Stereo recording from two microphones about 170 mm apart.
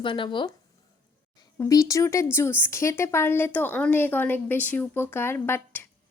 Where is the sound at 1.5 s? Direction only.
20° left (ahead or behind).